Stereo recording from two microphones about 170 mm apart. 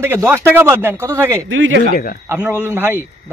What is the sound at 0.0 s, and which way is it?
A man's voice, 15° right (ahead or behind).